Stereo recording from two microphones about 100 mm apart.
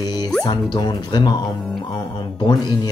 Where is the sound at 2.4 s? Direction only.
45° left (ahead or behind).